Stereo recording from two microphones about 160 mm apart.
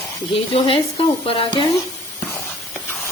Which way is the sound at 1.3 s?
35° left (ahead or behind).